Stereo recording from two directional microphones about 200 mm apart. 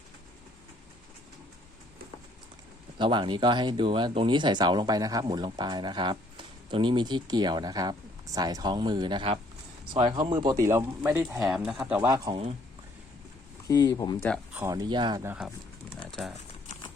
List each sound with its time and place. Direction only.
3.0 s speech: 25° right (ahead or behind)
13.7 s speech: 15° left (ahead or behind)
14.5 s speech: 15° right (ahead or behind)
15.3 s speech: 5° right (ahead or behind)